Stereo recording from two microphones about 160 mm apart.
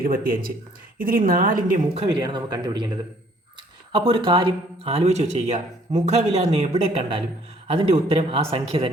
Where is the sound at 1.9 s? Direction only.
30° right (ahead or behind).